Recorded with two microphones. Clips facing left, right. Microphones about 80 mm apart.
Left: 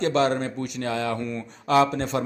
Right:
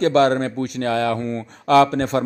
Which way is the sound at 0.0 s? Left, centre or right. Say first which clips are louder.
Right 6 dB; right.